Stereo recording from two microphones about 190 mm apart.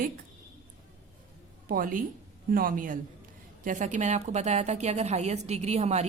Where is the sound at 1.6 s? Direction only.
45° right (ahead or behind).